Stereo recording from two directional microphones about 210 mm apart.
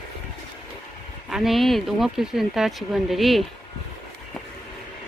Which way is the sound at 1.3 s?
Centre (ahead or behind).